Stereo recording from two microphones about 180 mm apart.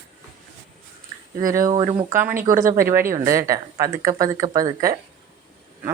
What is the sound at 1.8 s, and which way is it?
Speech, 20° right (ahead or behind).